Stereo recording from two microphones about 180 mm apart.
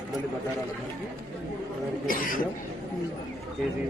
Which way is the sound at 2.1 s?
50° left (ahead or behind).